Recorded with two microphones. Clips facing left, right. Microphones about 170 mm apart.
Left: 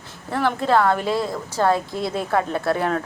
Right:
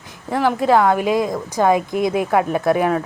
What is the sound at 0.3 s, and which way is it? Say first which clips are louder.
Speech: right 4 dB; 10° right (ahead or behind).